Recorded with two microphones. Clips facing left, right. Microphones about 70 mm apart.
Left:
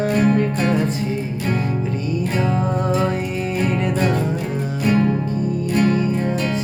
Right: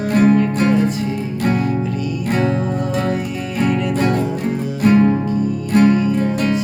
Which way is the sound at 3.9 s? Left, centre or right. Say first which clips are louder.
Right 2 dB; right.